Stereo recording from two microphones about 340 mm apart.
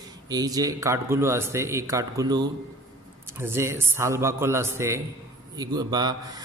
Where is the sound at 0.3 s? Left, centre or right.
Centre.